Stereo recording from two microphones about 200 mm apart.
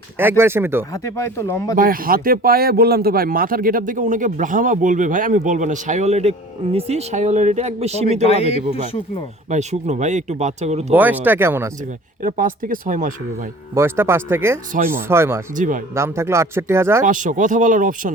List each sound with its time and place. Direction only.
0.2 s speech: 10° right (ahead or behind)
1.1 s speech: 15° left (ahead or behind)
1.7 s speech: 45° right (ahead or behind)
9.5 s speech: 35° right (ahead or behind)
10.9 s speech: 10° right (ahead or behind)
12.2 s speech: 40° right (ahead or behind)
13.7 s speech: 10° right (ahead or behind)
15.5 s speech: 40° right (ahead or behind)
16.0 s speech: 15° right (ahead or behind)
17.1 s speech: 40° right (ahead or behind)